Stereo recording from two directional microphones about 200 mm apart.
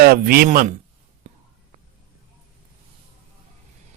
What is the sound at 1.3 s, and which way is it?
Whispering, 35° right (ahead or behind).